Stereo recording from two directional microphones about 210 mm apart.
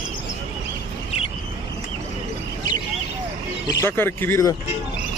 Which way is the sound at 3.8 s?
10° left (ahead or behind).